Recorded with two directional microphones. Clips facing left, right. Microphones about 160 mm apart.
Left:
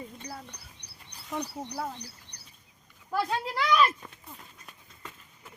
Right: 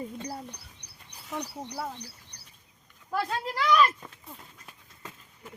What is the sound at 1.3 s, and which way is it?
Speech, centre (ahead or behind).